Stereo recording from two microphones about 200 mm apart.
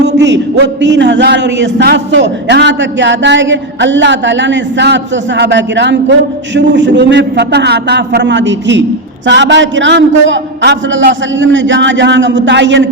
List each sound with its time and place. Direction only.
0.2 s a man's voice: 60° right (ahead or behind)